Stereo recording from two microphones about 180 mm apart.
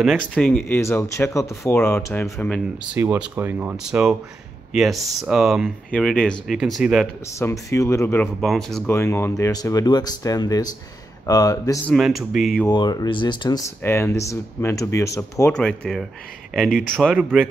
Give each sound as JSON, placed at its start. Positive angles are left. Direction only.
{"t": 0.0, "sound": "speech", "side_deg": 0}
{"t": 2.9, "sound": "speech", "side_deg": -10}
{"t": 7.3, "sound": "speech", "side_deg": 15}
{"t": 8.4, "sound": "speech", "side_deg": 0}
{"t": 8.9, "sound": "speech", "side_deg": 15}
{"t": 11.9, "sound": "speech", "side_deg": 0}
{"t": 12.6, "sound": "speech", "side_deg": 20}
{"t": 15.5, "sound": "speech", "side_deg": 5}